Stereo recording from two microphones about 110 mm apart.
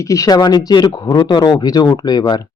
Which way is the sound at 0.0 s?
30° left (ahead or behind).